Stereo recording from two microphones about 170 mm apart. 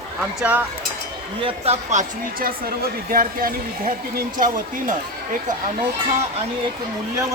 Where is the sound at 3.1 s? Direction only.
55° right (ahead or behind).